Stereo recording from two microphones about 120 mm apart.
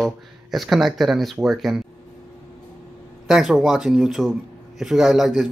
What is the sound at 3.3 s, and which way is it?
Speech, 5° right (ahead or behind).